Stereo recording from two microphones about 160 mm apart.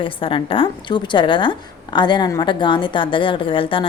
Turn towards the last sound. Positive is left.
turn(degrees=35)  # may be behind; listen again after turning